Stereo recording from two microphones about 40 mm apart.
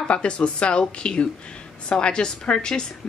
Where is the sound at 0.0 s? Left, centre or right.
Left.